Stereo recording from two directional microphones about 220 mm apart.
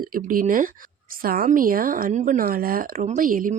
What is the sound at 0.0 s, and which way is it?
Speech, 40° right (ahead or behind).